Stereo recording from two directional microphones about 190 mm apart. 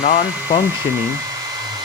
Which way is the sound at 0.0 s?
50° left (ahead or behind).